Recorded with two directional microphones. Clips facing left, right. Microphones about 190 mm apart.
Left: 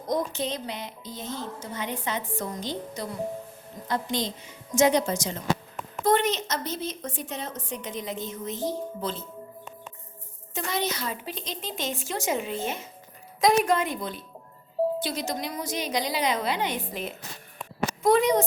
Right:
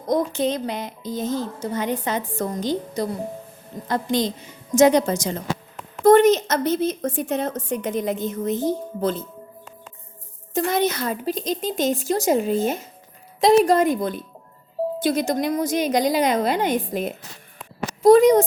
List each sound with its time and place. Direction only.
0.3 s a woman's voice: 50° right (ahead or behind)
10.5 s a woman's voice: 50° right (ahead or behind)